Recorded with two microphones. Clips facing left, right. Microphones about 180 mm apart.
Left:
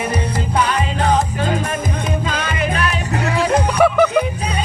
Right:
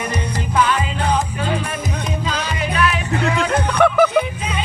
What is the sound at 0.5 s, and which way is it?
Music, 35° left (ahead or behind).